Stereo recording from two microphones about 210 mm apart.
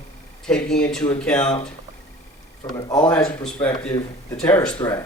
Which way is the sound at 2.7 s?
20° left (ahead or behind).